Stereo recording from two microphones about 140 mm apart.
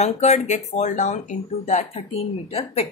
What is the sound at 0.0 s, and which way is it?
Speech, 50° left (ahead or behind).